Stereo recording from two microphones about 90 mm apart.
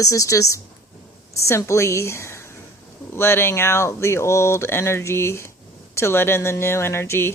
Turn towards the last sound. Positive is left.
turn(degrees=25)  # may be behind; listen again after turning